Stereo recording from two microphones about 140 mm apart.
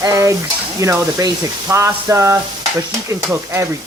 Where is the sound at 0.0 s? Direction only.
25° right (ahead or behind).